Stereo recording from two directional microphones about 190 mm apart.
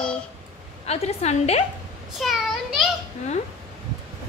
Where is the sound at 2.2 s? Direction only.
Centre (ahead or behind).